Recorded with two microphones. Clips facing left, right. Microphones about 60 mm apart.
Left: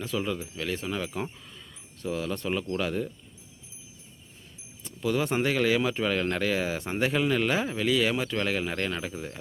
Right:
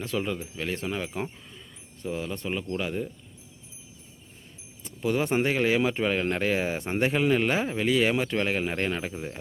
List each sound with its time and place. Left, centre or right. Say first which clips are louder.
0.2 s speech: right 1 dB; right; by 3.1 s centre
5.0 s speech: right 1 dB; right